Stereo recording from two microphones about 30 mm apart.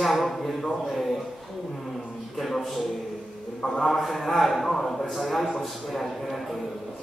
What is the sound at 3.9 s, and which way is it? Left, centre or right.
A man's voice, centre.